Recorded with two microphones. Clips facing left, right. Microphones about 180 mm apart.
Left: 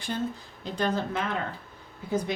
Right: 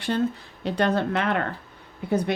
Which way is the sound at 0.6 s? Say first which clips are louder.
Right 5 dB; 70° right (ahead or behind).